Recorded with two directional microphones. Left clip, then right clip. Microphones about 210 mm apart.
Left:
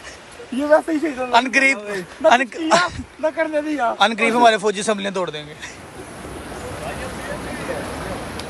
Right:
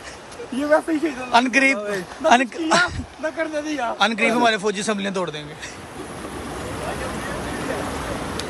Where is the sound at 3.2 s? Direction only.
30° left (ahead or behind).